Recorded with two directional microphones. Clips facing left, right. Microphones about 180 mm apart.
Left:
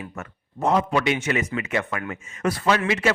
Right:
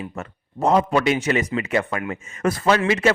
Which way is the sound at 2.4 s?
45° right (ahead or behind).